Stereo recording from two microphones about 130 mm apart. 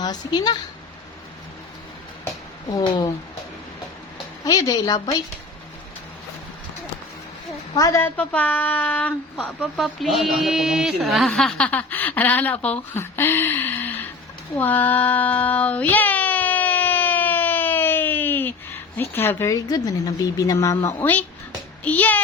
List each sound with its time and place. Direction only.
0.0 s speech: 35° left (ahead or behind)
2.6 s speech: 35° left (ahead or behind)
4.4 s speech: 30° left (ahead or behind)
7.8 s speech: 25° left (ahead or behind)
9.6 s speech: centre (ahead or behind); by 14.0 s 15° left (ahead or behind)
14.5 s child singing: 15° left (ahead or behind)
18.9 s speech: 15° left (ahead or behind)
21.0 s speech: 15° left (ahead or behind)